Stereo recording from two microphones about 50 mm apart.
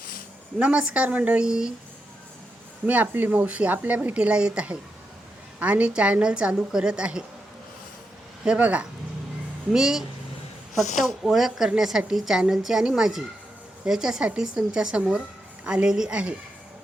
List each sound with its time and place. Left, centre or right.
0.6 s a woman's voice: right
1.4 s a woman's voice: centre
2.8 s speech: right
3.1 s a woman's voice: right; by 7.3 s centre
8.5 s speech: right
9.7 s a woman's voice: centre
11.3 s a woman's voice: centre